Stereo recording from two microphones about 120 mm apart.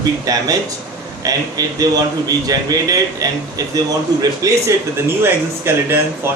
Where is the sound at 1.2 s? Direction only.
30° right (ahead or behind).